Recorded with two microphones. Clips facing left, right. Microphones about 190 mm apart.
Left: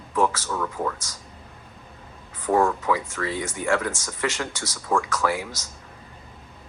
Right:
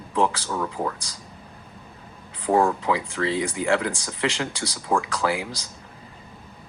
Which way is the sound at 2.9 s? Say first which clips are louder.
Right 2 dB; 20° right (ahead or behind).